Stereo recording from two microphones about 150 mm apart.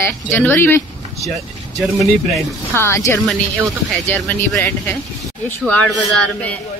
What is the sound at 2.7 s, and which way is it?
Speech, 15° left (ahead or behind).